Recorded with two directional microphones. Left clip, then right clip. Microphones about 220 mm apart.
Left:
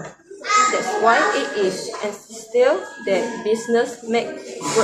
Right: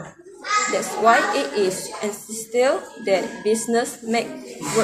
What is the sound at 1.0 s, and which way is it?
A woman's voice, 40° right (ahead or behind).